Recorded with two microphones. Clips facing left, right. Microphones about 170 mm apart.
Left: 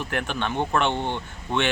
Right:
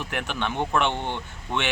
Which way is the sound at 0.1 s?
15° right (ahead or behind).